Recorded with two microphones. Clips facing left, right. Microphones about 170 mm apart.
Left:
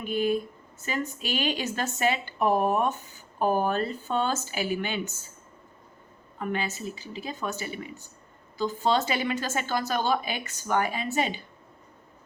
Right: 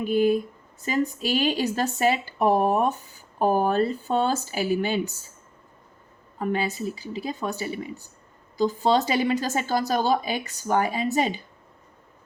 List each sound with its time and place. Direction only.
0.0 s speech: 35° right (ahead or behind)
6.4 s speech: 35° right (ahead or behind)